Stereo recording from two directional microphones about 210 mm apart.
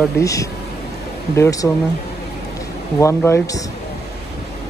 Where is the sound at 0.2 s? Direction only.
15° left (ahead or behind).